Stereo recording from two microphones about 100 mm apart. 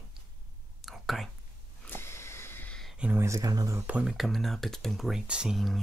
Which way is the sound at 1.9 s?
25° left (ahead or behind).